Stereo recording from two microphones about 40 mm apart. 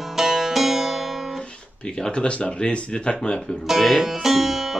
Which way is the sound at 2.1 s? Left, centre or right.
Left.